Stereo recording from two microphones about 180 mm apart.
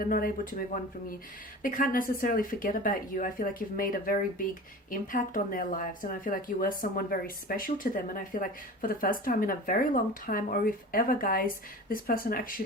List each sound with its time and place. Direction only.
0.0 s speech: 50° left (ahead or behind)
1.6 s speech: 50° left (ahead or behind)